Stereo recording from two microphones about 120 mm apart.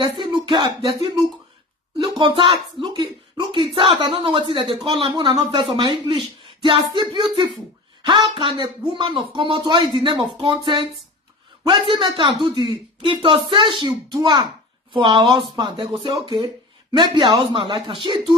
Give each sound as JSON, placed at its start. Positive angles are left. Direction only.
{"t": 0.0, "sound": "speech", "side_deg": -40}
{"t": 2.0, "sound": "speech", "side_deg": -45}
{"t": 11.9, "sound": "speech", "side_deg": -40}